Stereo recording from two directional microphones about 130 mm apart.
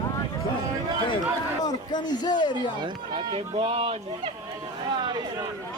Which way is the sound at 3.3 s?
45° right (ahead or behind).